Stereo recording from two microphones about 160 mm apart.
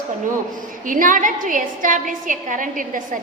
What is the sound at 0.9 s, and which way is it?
A woman's voice, 55° right (ahead or behind).